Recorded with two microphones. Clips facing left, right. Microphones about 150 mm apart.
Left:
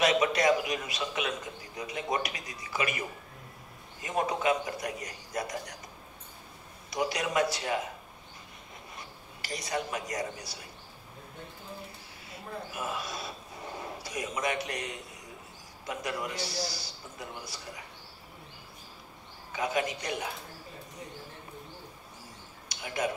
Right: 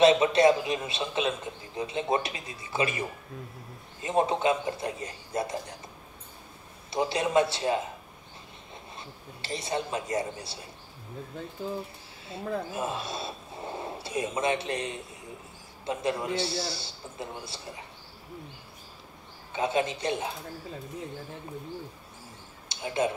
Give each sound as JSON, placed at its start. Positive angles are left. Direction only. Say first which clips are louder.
{"t": 0.0, "sound": "a man's voice", "louder": "right 6 dB", "side_deg": -25}
{"t": 6.9, "sound": "a man's voice", "louder": "right 4 dB", "side_deg": -25}
{"t": 8.9, "sound": "a man's voice", "louder": "right 3 dB", "side_deg": -25}
{"t": 12.3, "sound": "a man's voice", "louder": "right 8 dB", "side_deg": -25}
{"t": 19.5, "sound": "a man's voice", "louder": "right 3 dB", "side_deg": -25}
{"t": 22.7, "sound": "speech", "louder": "right 4 dB", "side_deg": -25}